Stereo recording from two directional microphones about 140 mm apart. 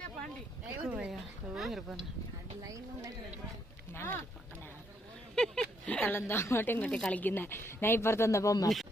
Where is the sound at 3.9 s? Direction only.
15° left (ahead or behind).